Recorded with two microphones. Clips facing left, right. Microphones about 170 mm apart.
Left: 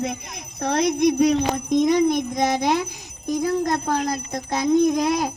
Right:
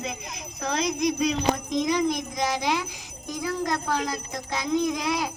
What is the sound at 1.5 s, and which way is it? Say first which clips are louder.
Jingle bell: left 7 dB; 50° left (ahead or behind).